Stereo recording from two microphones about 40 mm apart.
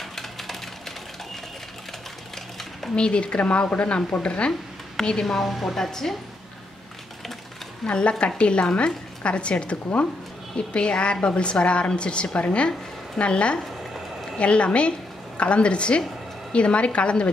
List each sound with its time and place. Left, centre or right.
0.0 s coin: centre
3.0 s a woman's voice: left
5.2 s a woman's voice: centre
7.8 s a woman's voice: left